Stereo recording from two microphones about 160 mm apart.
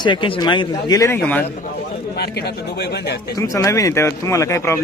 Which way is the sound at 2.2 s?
90° left.